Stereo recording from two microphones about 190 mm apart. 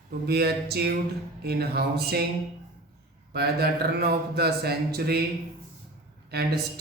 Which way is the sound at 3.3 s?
55° right (ahead or behind).